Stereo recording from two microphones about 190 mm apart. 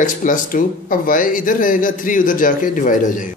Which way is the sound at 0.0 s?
45° left (ahead or behind).